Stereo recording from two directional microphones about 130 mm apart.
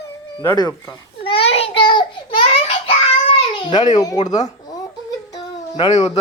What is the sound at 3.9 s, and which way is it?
Speech, 30° left (ahead or behind).